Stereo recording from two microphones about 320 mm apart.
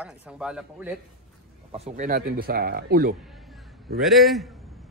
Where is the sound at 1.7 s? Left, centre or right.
Centre.